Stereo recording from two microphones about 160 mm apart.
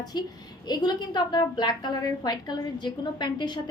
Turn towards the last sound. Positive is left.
turn(degrees=30)  # may be behind; listen again after turning